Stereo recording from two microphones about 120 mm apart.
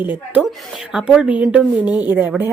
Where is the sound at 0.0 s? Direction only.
15° right (ahead or behind).